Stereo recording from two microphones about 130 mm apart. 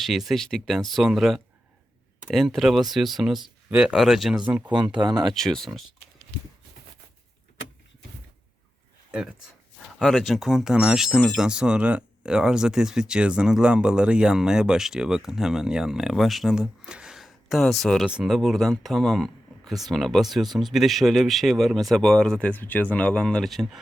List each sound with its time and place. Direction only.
0.0 s speech: centre (ahead or behind)
4.7 s speech: 35° right (ahead or behind)
5.3 s speech: 5° left (ahead or behind)
10.0 s speech: centre (ahead or behind)